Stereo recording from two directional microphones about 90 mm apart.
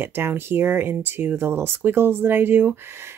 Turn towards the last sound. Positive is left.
turn(degrees=-30)  # may be behind; listen again after turning